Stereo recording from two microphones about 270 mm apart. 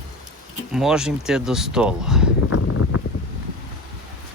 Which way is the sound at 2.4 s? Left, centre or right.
Left.